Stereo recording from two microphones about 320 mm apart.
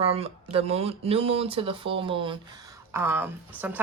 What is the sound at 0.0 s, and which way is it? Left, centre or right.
Speech, centre.